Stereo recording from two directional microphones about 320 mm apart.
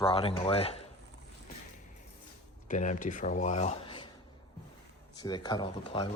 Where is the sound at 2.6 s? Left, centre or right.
Left.